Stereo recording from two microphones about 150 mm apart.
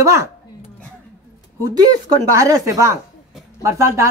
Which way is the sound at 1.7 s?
25° right (ahead or behind).